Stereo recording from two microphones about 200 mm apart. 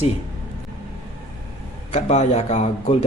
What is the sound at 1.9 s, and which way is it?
Speech, 30° left (ahead or behind).